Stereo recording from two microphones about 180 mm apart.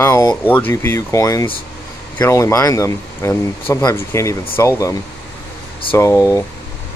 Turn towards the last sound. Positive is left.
turn(degrees=15)  # may be behind; listen again after turning